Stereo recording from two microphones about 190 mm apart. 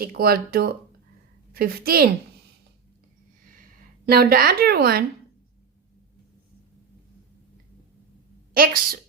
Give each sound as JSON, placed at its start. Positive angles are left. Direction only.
{"t": 0.0, "sound": "a woman's voice", "side_deg": -55}
{"t": 4.0, "sound": "a woman's voice", "side_deg": -55}
{"t": 8.5, "sound": "a woman's voice", "side_deg": -50}